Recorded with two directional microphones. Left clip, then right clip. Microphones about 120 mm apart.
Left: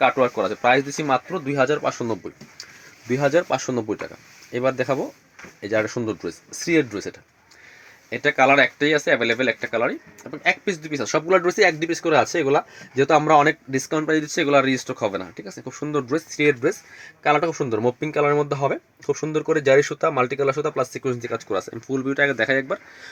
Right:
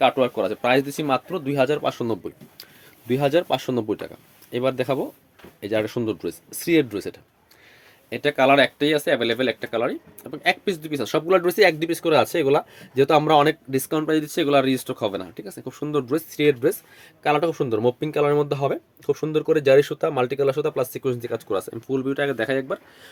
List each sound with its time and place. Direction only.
0.0 s speech: 20° right (ahead or behind)